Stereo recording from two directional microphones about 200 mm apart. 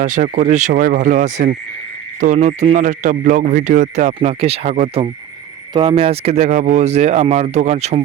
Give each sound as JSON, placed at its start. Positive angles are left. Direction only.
{"t": 0.0, "sound": "speech", "side_deg": -40}